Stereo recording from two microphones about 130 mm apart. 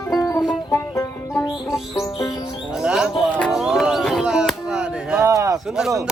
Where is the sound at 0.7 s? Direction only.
20° left (ahead or behind).